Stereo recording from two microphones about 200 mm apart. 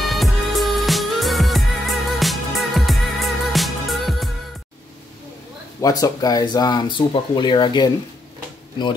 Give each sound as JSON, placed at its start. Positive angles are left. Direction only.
{"t": 0.0, "sound": "music", "side_deg": 0}
{"t": 5.8, "sound": "speech", "side_deg": 15}